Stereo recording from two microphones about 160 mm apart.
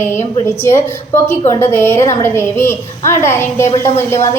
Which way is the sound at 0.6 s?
15° left (ahead or behind).